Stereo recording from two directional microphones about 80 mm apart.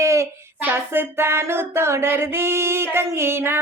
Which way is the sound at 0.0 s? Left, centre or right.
Right.